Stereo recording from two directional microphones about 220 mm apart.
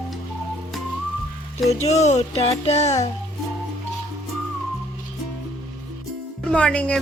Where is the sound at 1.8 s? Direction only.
30° left (ahead or behind).